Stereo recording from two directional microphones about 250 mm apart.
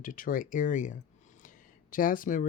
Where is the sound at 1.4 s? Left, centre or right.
Left.